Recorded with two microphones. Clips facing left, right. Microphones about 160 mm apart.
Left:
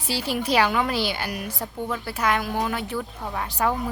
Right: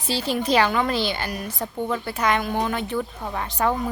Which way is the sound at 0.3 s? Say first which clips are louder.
Right 1 dB; 10° left (ahead or behind).